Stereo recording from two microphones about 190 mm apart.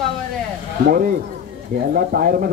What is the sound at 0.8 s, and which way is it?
Speech, 45° right (ahead or behind).